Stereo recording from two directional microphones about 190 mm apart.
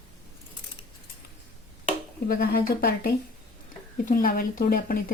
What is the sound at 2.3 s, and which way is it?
Speech, 55° left (ahead or behind).